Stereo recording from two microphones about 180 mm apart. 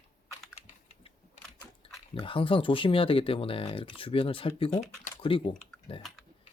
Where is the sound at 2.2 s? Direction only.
30° left (ahead or behind).